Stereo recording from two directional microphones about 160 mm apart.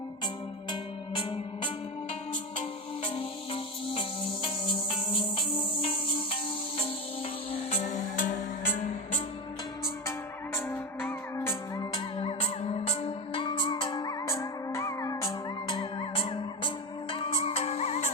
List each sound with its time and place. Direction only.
0.7 s music: 30° left (ahead or behind)
3.0 s music: 35° left (ahead or behind)
7.7 s music: 50° left (ahead or behind)
9.8 s music: 15° left (ahead or behind)
11.9 s music: 35° left (ahead or behind)
15.7 s music: 30° left (ahead or behind)